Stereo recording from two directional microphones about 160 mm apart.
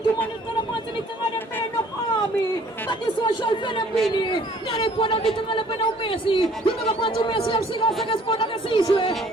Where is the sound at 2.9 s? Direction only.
30° left (ahead or behind).